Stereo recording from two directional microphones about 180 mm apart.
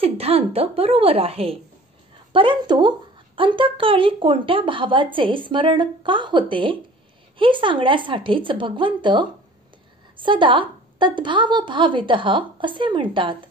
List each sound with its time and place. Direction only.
0.0 s a woman's voice: 35° right (ahead or behind)